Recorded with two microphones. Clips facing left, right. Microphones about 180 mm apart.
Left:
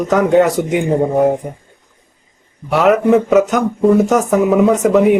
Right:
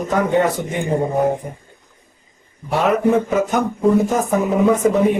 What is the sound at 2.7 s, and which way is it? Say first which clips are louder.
Speech: left 5 dB; 80° left.